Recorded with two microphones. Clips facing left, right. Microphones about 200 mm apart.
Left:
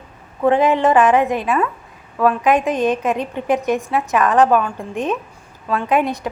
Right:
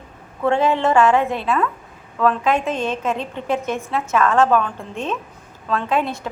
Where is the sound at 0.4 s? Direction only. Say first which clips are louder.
Left 3 dB; 15° left (ahead or behind).